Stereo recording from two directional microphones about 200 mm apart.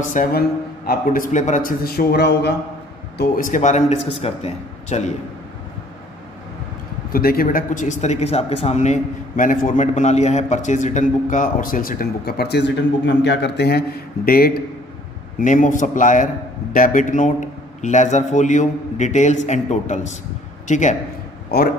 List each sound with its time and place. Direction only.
0.0 s a man's voice: 40° left (ahead or behind)
3.2 s speech: 40° left (ahead or behind)
7.1 s a man's voice: 50° left (ahead or behind)
21.5 s speech: 50° left (ahead or behind)